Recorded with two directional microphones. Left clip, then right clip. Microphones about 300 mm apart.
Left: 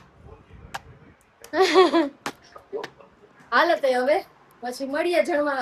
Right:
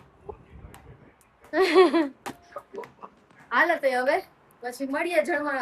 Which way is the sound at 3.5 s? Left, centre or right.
Centre.